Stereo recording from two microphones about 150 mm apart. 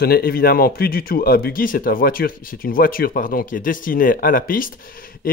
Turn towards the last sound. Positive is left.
turn(degrees=75)  # may be behind; listen again after turning